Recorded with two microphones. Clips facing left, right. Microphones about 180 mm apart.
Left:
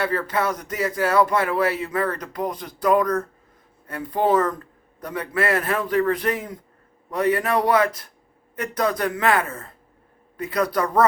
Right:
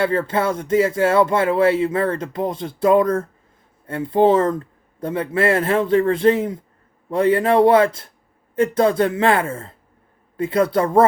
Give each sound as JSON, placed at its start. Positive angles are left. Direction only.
{"t": 0.0, "sound": "speech", "side_deg": -25}